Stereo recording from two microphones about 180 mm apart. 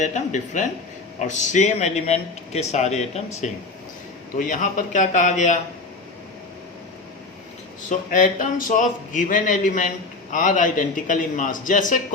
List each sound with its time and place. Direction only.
0.0 s a man's voice: 40° left (ahead or behind)
7.9 s a man's voice: 45° left (ahead or behind)